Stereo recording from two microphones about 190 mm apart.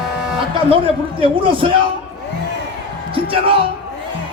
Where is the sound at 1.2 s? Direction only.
30° right (ahead or behind).